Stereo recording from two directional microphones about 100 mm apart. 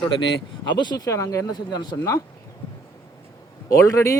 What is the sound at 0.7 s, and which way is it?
Speech, 45° left (ahead or behind).